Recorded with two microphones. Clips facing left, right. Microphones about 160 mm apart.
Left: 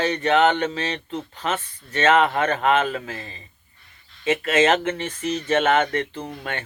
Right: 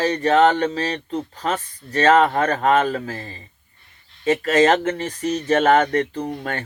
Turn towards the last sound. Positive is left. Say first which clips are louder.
# right 5 dB
turn(degrees=-40)  # may be behind; listen again after turning